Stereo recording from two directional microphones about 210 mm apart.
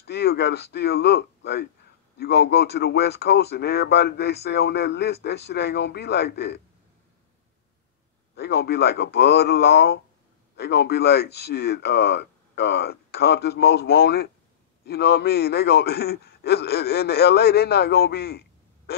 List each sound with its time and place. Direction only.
0.0 s speech: 50° left (ahead or behind)
8.4 s speech: 50° left (ahead or behind)